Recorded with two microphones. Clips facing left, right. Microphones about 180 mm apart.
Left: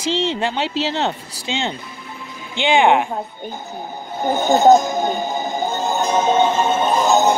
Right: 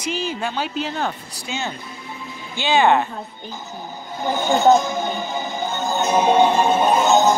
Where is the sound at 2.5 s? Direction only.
15° left (ahead or behind).